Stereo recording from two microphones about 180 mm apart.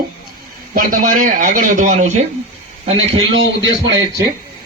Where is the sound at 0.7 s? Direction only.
50° right (ahead or behind).